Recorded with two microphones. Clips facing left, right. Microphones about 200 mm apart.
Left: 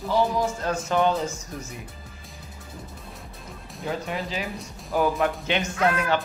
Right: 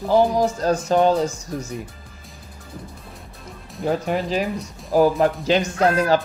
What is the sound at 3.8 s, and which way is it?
Speech, 45° right (ahead or behind).